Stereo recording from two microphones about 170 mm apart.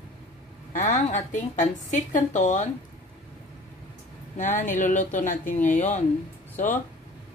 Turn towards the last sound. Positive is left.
turn(degrees=50)  # may be behind; listen again after turning